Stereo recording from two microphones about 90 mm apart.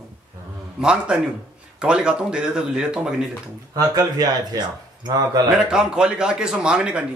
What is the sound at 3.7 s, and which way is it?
Speech, 45° right (ahead or behind).